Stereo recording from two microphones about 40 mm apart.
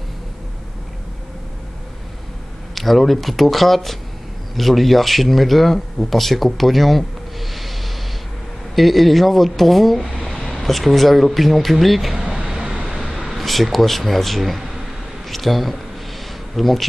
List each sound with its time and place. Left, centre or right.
2.7 s speech: centre
12.4 s vehicle: centre
12.8 s vehicle: centre
13.1 s speech: centre